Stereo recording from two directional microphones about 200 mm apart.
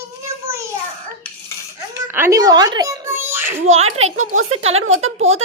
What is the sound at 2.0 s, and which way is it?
A woman's voice, 10° right (ahead or behind).